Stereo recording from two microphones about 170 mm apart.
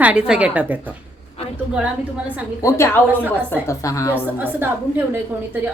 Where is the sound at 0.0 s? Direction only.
5° right (ahead or behind).